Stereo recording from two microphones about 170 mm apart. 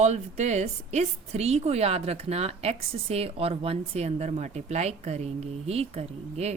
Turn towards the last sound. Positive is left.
turn(degrees=-40)  # may be behind; listen again after turning